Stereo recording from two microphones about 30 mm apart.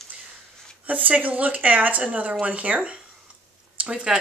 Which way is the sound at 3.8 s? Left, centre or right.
Right.